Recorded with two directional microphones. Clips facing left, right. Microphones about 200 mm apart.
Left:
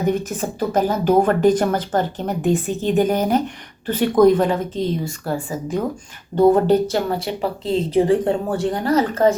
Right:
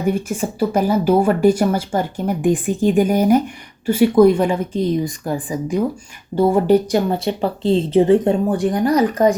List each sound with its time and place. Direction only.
0.1 s speech: 10° right (ahead or behind)